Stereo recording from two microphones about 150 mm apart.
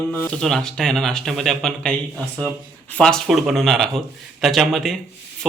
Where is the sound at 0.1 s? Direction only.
5° left (ahead or behind).